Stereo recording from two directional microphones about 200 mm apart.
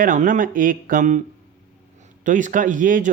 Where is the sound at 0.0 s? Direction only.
40° right (ahead or behind).